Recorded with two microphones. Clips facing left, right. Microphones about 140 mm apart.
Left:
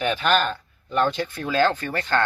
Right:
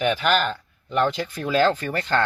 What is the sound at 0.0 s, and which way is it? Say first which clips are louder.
Speech: even; 10° right (ahead or behind).